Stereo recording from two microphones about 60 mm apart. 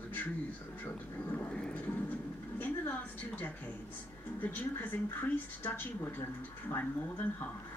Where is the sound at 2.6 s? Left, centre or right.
Left.